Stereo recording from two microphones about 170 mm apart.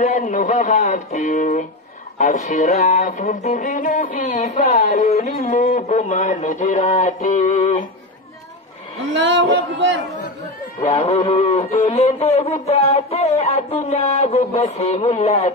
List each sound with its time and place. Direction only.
0.0 s music: 45° left (ahead or behind)
9.1 s a sound: 90° right
10.8 s speech: 35° left (ahead or behind)